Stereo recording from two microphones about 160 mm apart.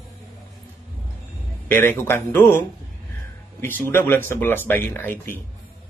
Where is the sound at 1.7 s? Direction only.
15° left (ahead or behind).